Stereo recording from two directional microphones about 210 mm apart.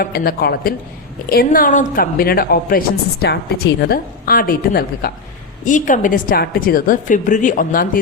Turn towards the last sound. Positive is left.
turn(degrees=40)  # may be behind; listen again after turning